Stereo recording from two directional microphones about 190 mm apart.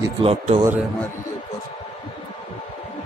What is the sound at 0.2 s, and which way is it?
Speech, 30° right (ahead or behind).